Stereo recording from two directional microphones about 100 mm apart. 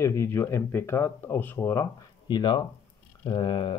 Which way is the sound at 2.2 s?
50° left (ahead or behind).